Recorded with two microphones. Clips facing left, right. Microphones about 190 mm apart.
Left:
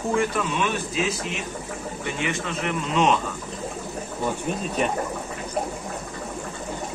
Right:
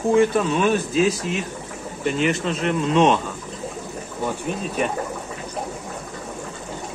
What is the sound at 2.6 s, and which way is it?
Speech, 30° right (ahead or behind).